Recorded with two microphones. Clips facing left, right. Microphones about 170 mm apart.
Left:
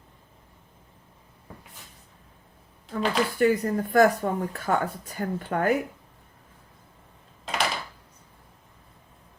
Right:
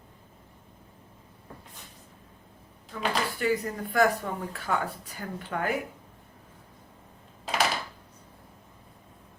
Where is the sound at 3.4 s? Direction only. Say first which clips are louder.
Left 6 dB; 45° left (ahead or behind).